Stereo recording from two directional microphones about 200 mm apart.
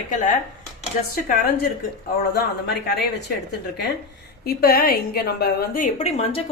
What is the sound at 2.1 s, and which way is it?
Speech, 55° left (ahead or behind).